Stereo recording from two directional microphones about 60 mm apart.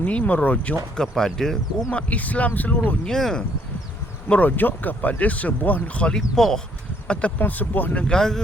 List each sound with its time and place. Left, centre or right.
0.0 s speech: left
0.9 s speech: centre
1.9 s speech: left
3.0 s speech: centre
4.3 s speech: left
6.3 s speech: centre
7.1 s speech: left
8.0 s speech: centre